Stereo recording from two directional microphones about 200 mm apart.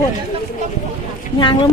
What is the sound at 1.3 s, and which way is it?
Speech, 25° left (ahead or behind).